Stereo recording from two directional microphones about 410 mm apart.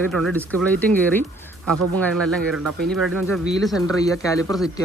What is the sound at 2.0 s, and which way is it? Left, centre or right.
Speech, centre.